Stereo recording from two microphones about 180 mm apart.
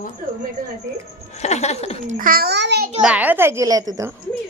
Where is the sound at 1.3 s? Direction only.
40° left (ahead or behind).